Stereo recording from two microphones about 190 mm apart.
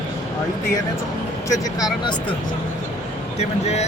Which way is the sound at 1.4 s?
20° left (ahead or behind).